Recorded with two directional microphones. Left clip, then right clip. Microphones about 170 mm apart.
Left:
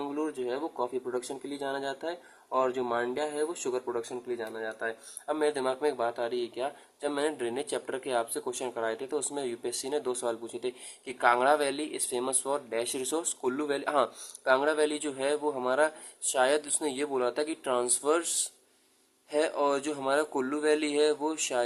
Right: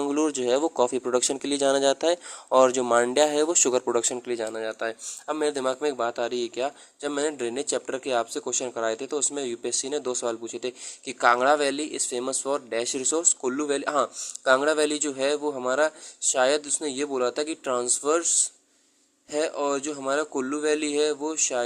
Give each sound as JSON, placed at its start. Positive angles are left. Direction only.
{"t": 0.1, "sound": "speech", "side_deg": -35}